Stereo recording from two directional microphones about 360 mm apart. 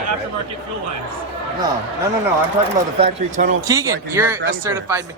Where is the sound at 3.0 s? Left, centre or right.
Centre.